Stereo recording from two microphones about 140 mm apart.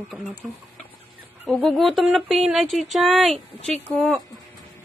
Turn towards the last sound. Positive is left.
turn(degrees=5)  # may be behind; listen again after turning